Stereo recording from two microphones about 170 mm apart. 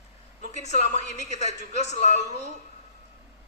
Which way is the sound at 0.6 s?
40° left (ahead or behind).